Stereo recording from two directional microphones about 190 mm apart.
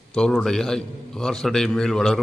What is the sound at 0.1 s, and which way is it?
A man's voice, 5° left (ahead or behind).